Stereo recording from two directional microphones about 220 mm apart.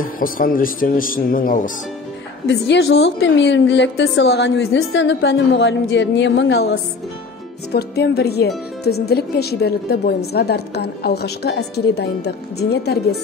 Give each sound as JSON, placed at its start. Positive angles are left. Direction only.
{"t": 0.0, "sound": "speech", "side_deg": 40}
{"t": 2.4, "sound": "a woman's voice", "side_deg": 50}